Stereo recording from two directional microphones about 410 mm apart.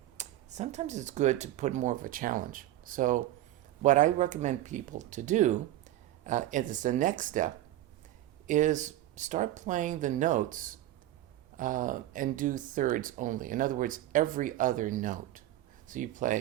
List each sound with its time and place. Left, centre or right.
0.2 s speech: centre